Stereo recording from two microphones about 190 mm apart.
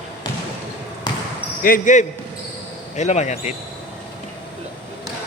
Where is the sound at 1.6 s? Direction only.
45° left (ahead or behind).